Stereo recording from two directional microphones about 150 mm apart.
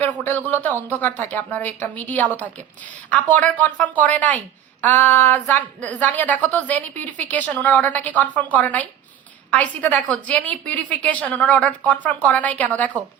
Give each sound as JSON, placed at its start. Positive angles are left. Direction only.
{"t": 0.0, "sound": "a woman's voice", "side_deg": 10}